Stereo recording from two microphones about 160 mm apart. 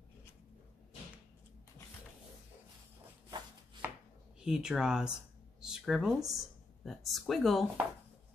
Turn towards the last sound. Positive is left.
turn(degrees=0)  # may be behind; listen again after turning